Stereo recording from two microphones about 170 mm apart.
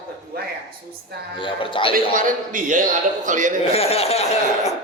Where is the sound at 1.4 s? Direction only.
30° left (ahead or behind).